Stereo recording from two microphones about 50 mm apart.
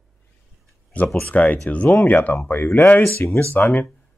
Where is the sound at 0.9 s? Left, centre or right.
Left.